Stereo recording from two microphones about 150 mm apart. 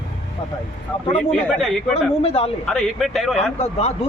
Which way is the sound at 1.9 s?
40° left (ahead or behind).